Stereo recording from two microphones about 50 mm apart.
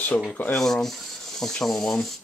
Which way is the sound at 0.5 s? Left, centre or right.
Centre.